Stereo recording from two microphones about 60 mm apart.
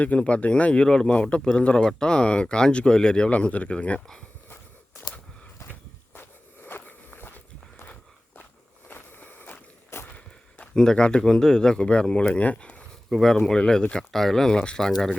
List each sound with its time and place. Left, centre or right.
0.0 s speech: left
6.7 s walk: left
8.9 s vehicle: left
9.9 s a sound: left
10.8 s speech: centre
13.1 s speech: centre